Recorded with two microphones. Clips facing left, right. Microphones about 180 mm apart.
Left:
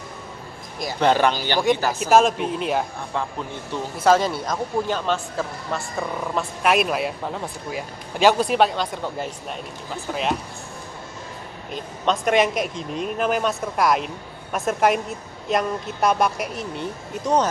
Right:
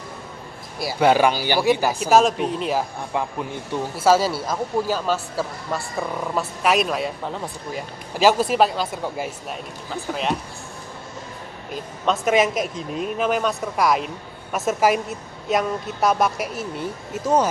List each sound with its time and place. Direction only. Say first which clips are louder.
0.8 s speech: right 2 dB; 10° right (ahead or behind)
2.0 s speech: even; centre (ahead or behind)
11.7 s speech: even; centre (ahead or behind)